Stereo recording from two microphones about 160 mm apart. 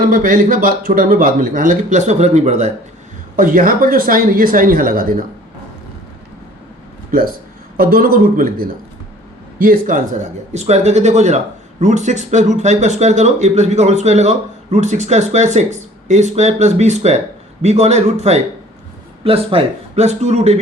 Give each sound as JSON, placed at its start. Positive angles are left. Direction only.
{"t": 0.0, "sound": "speech", "side_deg": -60}
{"t": 3.3, "sound": "speech", "side_deg": -60}
{"t": 7.8, "sound": "speech", "side_deg": -65}
{"t": 10.5, "sound": "speech", "side_deg": -45}